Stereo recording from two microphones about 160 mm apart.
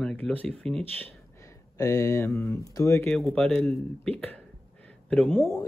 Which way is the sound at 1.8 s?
20° left (ahead or behind).